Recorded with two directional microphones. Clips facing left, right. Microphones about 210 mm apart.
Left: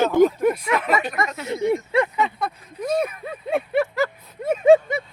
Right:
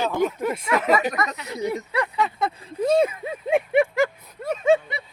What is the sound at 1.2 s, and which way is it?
Speech, 25° left (ahead or behind).